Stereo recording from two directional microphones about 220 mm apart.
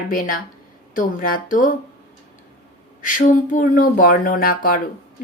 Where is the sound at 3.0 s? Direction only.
35° left (ahead or behind).